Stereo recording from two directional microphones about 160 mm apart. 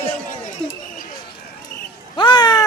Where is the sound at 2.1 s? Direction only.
30° left (ahead or behind).